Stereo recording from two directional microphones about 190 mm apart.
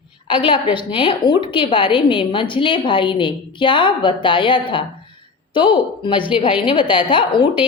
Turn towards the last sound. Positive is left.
turn(degrees=25)  # may be behind; listen again after turning